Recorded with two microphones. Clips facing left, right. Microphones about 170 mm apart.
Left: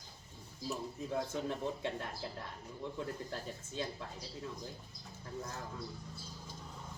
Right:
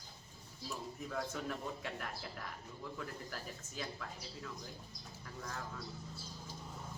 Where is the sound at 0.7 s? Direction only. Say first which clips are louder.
Left 4 dB; 25° left (ahead or behind).